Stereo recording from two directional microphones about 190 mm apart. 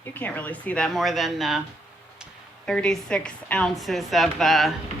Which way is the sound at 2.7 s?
5° left (ahead or behind).